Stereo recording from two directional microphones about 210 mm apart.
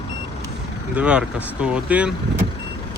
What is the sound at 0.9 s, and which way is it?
Speech, 5° right (ahead or behind).